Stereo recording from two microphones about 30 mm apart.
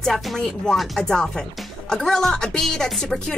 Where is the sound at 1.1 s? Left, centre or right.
Left.